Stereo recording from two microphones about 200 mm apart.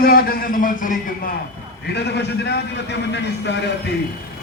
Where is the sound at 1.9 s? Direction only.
55° left (ahead or behind).